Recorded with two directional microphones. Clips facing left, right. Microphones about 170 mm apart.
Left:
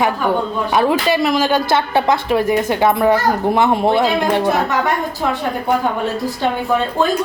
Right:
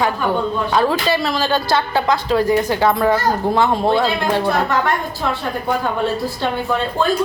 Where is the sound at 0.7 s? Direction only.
20° left (ahead or behind).